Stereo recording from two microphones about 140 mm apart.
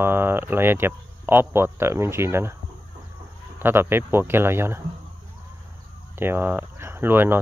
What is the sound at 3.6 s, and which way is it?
Speech, 15° right (ahead or behind).